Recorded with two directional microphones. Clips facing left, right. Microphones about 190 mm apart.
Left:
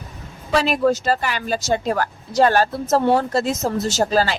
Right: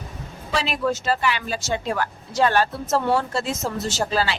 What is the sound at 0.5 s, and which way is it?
A woman's voice, 45° left (ahead or behind).